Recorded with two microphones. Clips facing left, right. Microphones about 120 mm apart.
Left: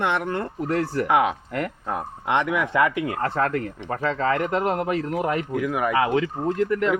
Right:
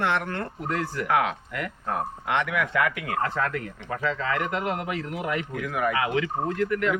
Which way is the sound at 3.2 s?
40° left (ahead or behind).